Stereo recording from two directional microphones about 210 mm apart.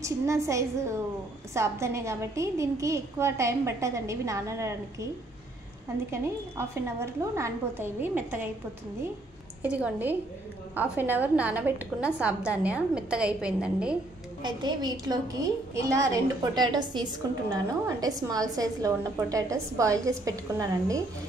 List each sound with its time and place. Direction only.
0.0 s a woman's voice: 15° right (ahead or behind)
6.1 s a woman's voice: 10° right (ahead or behind)
9.6 s a woman's voice: 5° right (ahead or behind)
14.4 s a woman's voice: 20° right (ahead or behind)